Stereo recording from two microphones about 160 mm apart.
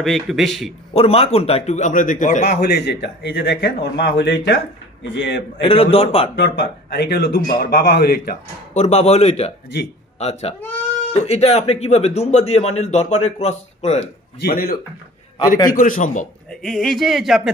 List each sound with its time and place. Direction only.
0.0 s speech: centre (ahead or behind)
0.9 s a man's voice: 40° left (ahead or behind); by 2.4 s 55° left (ahead or behind)
2.4 s a man's voice: 90° left
5.6 s speech: 35° left (ahead or behind)
6.3 s speech: 90° left
8.7 s a man's voice: 45° left (ahead or behind)
14.4 s a man's voice: 70° left (ahead or behind)
15.4 s a man's voice: 20° left (ahead or behind)
15.7 s a man's voice: 55° left (ahead or behind)
16.4 s speech: centre (ahead or behind)